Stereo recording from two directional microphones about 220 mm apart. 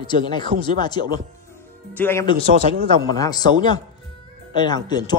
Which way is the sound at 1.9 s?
10° left (ahead or behind).